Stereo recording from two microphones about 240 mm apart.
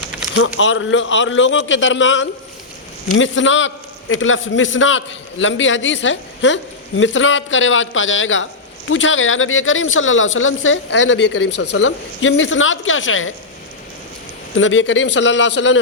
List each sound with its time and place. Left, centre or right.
0.3 s a man's voice: left
14.5 s a man's voice: left